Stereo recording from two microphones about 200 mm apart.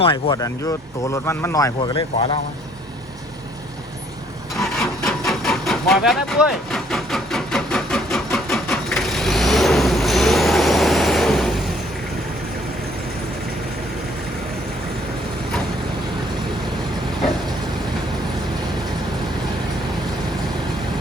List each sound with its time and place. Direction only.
0.0 s speech: 25° left (ahead or behind)
5.0 s vehicle: centre (ahead or behind)